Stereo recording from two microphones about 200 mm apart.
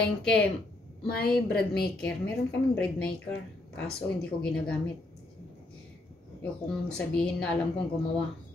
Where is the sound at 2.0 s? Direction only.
5° left (ahead or behind).